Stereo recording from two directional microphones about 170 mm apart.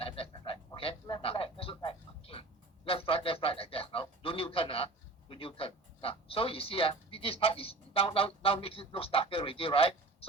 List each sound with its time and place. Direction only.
0.0 s a sound: 35° left (ahead or behind)
4.2 s radio: 35° left (ahead or behind)
5.3 s speech: 35° left (ahead or behind)